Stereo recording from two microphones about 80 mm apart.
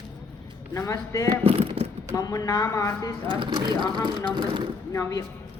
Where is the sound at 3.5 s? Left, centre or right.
Right.